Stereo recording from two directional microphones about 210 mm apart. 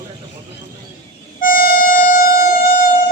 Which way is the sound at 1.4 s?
45° left (ahead or behind).